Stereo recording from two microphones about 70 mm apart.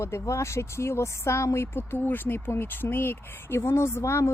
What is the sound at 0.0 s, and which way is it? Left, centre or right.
Speech, left.